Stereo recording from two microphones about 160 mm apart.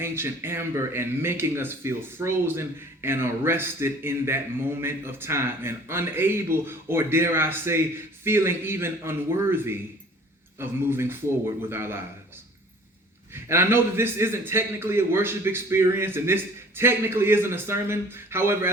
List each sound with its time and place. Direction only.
0.0 s speech: 15° right (ahead or behind)
13.3 s speech: 15° right (ahead or behind)